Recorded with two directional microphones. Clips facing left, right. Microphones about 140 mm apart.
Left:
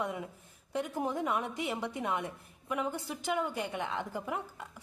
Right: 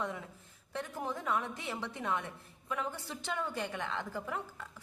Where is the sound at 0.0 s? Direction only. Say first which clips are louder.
Left 3 dB; 15° left (ahead or behind).